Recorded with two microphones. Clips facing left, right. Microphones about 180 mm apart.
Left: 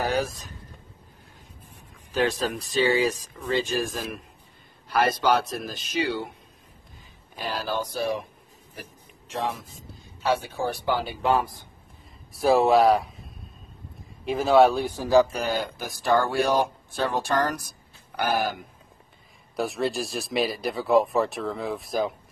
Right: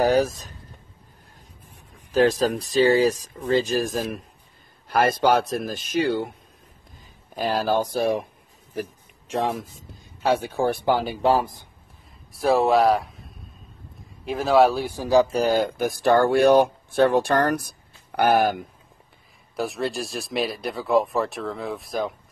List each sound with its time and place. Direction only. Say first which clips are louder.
0.0 s speech: right 7 dB; 40° right (ahead or behind)
2.1 s speech: right 6 dB; 40° right (ahead or behind)
7.3 s speech: right 7 dB; 45° right (ahead or behind)
9.3 s speech: right 5 dB; 50° right (ahead or behind)
12.3 s speech: even; centre (ahead or behind)
14.2 s speech: even; centre (ahead or behind); by 15.2 s 15° right (ahead or behind)
15.2 s speech: right 7 dB; 35° right (ahead or behind); by 18.6 s 60° right (ahead or behind)
19.5 s speech: even; centre (ahead or behind)